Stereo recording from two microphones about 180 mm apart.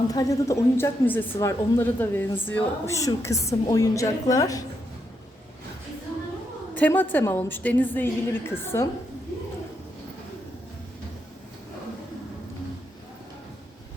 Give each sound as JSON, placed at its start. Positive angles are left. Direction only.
{"t": 0.1, "sound": "a woman's voice", "side_deg": 20}
{"t": 6.7, "sound": "a woman's voice", "side_deg": 10}